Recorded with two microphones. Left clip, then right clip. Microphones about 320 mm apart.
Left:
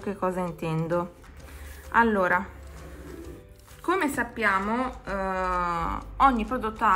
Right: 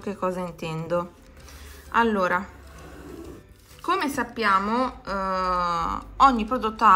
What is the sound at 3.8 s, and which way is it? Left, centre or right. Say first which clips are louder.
Speech: right 1 dB; centre.